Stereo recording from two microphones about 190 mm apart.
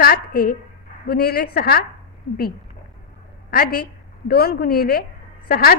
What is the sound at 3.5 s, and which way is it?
A woman's voice, 50° left (ahead or behind).